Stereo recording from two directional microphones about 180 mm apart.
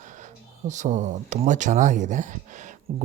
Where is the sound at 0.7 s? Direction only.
40° right (ahead or behind).